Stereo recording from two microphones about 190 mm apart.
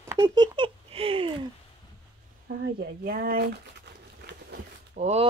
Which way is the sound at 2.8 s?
50° right (ahead or behind).